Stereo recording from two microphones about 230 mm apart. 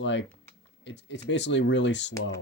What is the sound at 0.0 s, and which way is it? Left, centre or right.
Speech, left.